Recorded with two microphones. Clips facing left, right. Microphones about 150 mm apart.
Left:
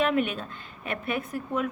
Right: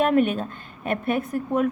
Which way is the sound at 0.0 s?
45° right (ahead or behind).